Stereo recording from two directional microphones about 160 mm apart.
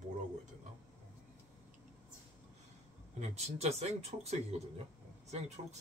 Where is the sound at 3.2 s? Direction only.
45° right (ahead or behind).